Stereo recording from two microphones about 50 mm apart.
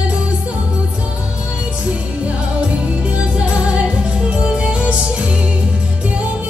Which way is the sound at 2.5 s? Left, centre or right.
Right.